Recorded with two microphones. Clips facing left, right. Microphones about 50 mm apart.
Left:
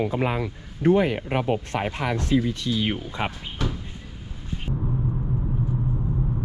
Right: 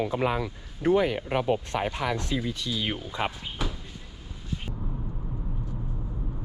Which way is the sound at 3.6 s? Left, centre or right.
Centre.